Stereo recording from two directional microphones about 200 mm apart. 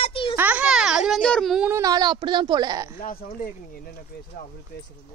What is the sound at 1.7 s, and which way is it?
Speech, 20° right (ahead or behind).